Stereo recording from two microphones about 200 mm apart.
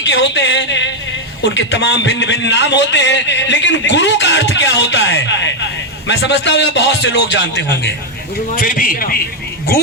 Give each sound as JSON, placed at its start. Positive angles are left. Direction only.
{"t": 0.0, "sound": "a man's voice", "side_deg": 65}
{"t": 8.5, "sound": "a man's voice", "side_deg": 45}